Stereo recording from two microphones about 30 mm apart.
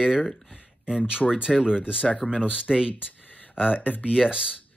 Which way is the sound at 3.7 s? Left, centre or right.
Left.